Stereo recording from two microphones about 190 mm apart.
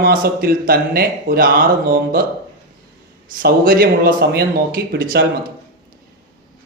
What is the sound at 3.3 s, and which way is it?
Speech, 50° right (ahead or behind).